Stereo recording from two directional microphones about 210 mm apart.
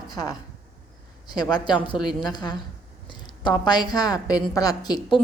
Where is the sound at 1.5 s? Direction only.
20° left (ahead or behind).